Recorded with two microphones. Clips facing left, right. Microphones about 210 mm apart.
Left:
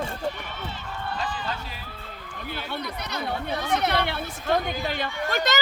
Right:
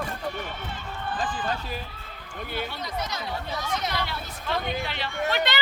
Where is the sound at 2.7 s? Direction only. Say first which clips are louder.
Even; 65° left (ahead or behind).